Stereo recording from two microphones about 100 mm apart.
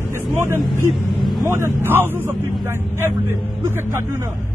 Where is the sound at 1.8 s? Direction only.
20° right (ahead or behind).